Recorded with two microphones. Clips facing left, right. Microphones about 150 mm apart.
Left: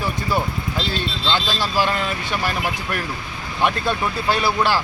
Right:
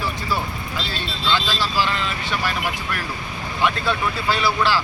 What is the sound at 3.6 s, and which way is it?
Speech, 45° left (ahead or behind).